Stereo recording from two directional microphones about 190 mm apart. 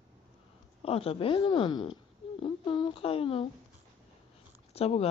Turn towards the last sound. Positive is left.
turn(degrees=30)  # may be behind; listen again after turning